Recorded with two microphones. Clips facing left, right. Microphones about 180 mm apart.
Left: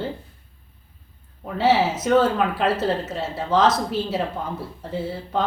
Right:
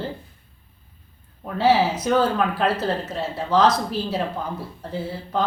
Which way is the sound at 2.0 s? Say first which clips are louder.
Left 2 dB; centre (ahead or behind).